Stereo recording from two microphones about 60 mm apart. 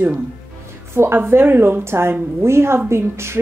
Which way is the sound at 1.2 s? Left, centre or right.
Right.